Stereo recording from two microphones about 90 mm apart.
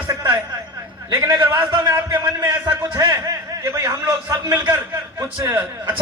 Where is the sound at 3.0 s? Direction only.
40° right (ahead or behind).